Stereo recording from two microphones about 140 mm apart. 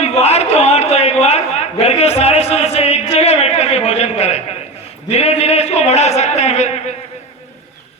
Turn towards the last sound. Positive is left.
turn(degrees=55)  # may be behind; listen again after turning